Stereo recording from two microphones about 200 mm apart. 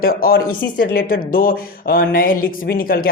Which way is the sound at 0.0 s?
45° left (ahead or behind).